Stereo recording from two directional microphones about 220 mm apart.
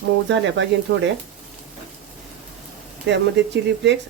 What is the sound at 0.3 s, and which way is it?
Speech, 55° right (ahead or behind).